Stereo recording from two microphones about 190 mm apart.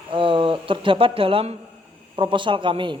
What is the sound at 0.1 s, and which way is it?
A woman's voice, 25° right (ahead or behind).